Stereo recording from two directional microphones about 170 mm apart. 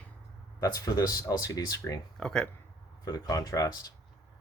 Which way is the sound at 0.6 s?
20° left (ahead or behind).